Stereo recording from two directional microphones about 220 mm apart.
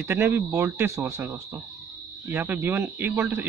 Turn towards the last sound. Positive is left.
turn(degrees=-10)  # may be behind; listen again after turning